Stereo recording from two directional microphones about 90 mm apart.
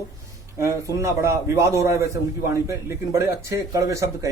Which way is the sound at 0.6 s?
35° right (ahead or behind).